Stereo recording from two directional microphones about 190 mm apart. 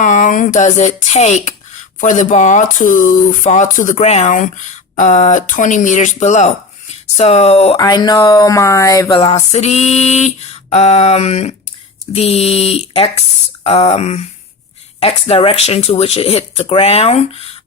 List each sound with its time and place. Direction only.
0.0 s speech: 40° left (ahead or behind)
7.8 s speech: 20° left (ahead or behind)